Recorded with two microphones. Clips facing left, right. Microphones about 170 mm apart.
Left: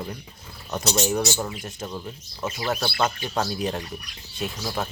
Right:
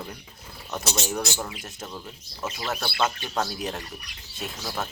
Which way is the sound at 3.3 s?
Centre (ahead or behind).